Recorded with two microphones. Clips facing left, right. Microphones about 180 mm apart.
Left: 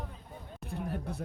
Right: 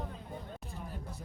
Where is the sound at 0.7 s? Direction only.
65° left (ahead or behind).